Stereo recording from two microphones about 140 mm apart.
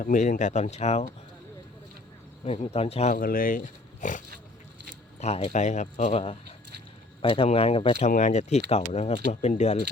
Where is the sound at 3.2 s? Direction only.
85° left; by 4.2 s 65° left (ahead or behind).